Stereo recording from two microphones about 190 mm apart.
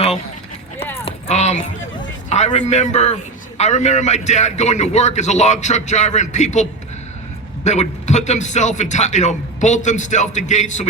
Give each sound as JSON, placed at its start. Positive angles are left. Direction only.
{"t": 1.0, "sound": "keys jangling", "side_deg": 35}
{"t": 2.3, "sound": "a man's voice", "side_deg": 35}